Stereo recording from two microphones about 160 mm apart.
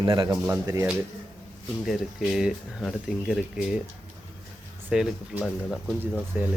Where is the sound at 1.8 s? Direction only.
Centre (ahead or behind).